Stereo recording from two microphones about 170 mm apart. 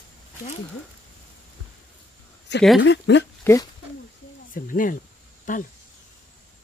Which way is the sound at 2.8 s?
90° left.